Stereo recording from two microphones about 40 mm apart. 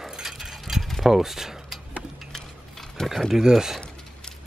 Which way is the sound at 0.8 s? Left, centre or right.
Centre.